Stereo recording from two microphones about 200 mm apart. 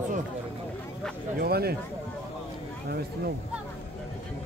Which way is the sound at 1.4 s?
50° right (ahead or behind).